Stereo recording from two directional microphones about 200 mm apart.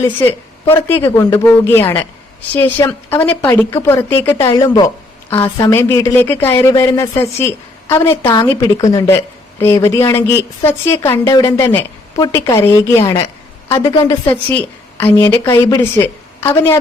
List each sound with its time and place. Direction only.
0.0 s a woman's voice: 15° left (ahead or behind)